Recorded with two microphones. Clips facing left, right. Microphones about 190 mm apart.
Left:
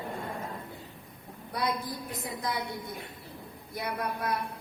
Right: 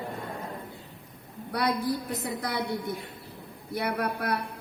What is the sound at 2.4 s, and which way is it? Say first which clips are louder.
Speech: left 1 dB; 70° right (ahead or behind).